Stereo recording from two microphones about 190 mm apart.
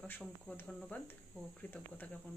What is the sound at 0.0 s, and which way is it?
Speech, 5° left (ahead or behind).